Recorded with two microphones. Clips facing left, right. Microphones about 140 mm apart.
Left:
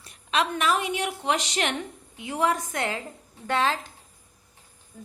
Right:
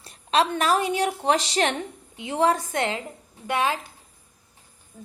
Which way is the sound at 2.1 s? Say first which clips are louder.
Right 3 dB; 25° right (ahead or behind).